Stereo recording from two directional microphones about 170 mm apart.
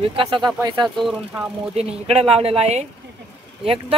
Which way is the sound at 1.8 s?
35° right (ahead or behind).